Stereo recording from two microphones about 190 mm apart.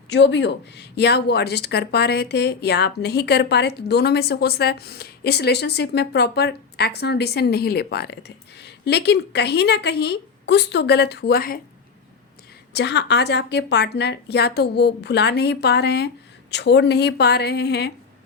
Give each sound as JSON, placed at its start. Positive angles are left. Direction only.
{"t": 0.1, "sound": "speech", "side_deg": 70}
{"t": 12.7, "sound": "speech", "side_deg": 65}